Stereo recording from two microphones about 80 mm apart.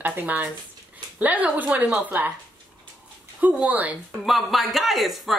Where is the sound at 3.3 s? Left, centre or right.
Centre.